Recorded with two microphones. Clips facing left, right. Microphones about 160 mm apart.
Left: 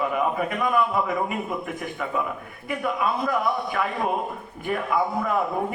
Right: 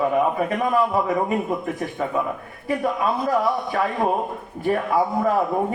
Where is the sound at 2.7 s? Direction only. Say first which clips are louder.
Right 3 dB; 35° right (ahead or behind).